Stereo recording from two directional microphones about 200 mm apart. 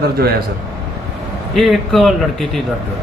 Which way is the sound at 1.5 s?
Centre (ahead or behind).